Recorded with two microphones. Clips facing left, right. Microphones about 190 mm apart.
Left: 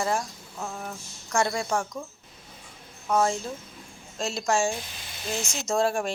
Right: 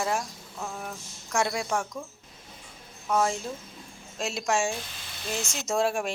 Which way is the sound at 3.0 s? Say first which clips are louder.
Left 2 dB; centre (ahead or behind).